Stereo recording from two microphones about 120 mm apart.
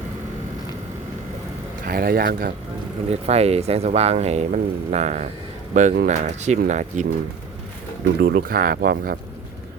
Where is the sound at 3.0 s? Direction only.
60° right (ahead or behind); by 7.1 s 85° right.